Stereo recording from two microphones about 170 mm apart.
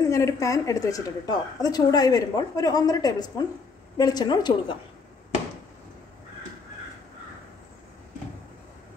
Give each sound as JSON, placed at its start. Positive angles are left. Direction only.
{"t": 0.1, "sound": "a woman's voice", "side_deg": 20}